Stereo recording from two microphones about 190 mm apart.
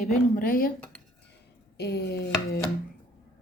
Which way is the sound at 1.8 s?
60° left (ahead or behind).